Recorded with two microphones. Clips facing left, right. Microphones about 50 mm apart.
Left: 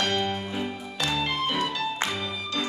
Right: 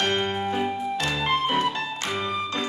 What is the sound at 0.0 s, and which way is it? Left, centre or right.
Music, right.